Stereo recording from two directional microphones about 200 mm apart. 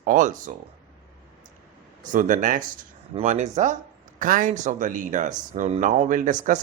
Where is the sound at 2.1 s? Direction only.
40° right (ahead or behind).